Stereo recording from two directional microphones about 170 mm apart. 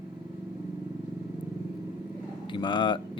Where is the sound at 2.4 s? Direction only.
30° left (ahead or behind).